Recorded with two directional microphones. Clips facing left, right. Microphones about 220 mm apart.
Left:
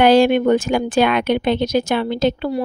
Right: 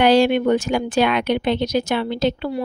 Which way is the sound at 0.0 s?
50° left (ahead or behind).